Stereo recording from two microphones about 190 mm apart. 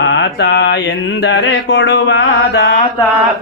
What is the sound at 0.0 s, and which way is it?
Mantra, 65° left (ahead or behind).